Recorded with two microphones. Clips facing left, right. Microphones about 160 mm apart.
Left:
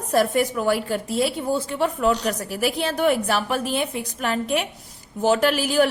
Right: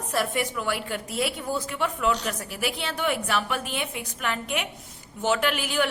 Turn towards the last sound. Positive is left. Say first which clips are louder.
# left 7 dB
turn(degrees=35)  # may be behind; listen again after turning